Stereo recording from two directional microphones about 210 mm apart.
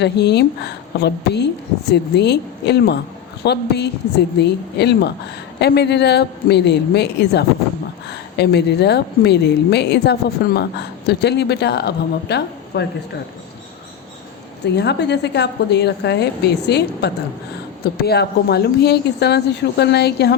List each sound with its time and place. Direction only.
0.0 s a woman's voice: 55° left (ahead or behind)
14.6 s a woman's voice: 55° left (ahead or behind)